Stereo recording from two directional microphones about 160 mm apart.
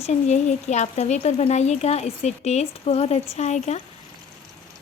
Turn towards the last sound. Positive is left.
turn(degrees=45)  # may be behind; listen again after turning